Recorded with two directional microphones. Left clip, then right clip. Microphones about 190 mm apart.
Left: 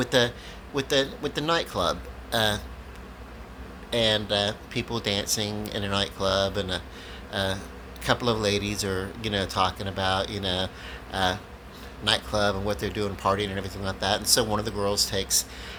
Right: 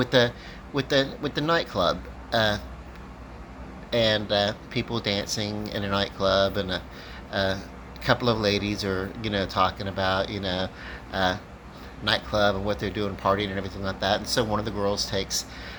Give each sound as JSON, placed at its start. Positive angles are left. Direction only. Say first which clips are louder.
{"t": 0.0, "sound": "speech", "louder": "right 2 dB", "side_deg": 15}
{"t": 3.9, "sound": "speech", "louder": "right 1 dB", "side_deg": 15}